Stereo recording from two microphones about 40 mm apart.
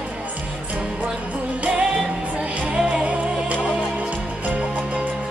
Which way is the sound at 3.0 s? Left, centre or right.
Right.